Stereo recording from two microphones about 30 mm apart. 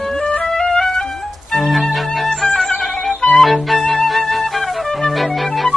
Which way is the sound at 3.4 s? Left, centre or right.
Centre.